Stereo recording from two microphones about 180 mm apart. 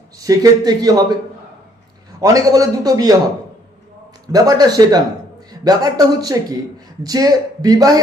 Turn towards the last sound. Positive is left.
turn(degrees=-20)  # may be behind; listen again after turning